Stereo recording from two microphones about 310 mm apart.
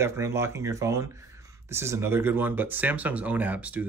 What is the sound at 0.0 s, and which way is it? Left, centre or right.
Speech, centre.